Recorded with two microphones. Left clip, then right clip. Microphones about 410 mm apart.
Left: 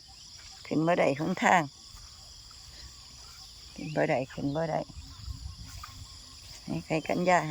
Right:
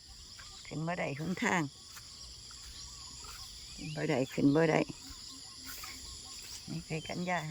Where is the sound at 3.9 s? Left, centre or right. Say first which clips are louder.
Left 7 dB; centre.